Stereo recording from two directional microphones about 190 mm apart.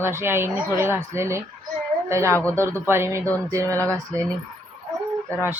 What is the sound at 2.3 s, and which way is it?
Speech, 10° left (ahead or behind).